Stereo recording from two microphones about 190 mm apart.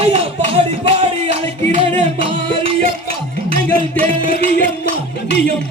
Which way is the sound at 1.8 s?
30° right (ahead or behind).